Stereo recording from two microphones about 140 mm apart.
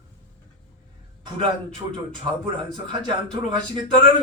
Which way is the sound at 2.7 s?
35° right (ahead or behind).